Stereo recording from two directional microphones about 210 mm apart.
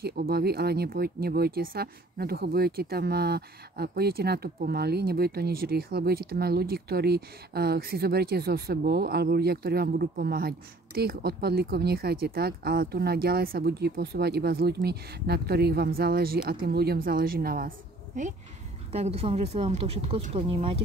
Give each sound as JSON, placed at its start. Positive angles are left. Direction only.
{"t": 0.0, "sound": "speech", "side_deg": -45}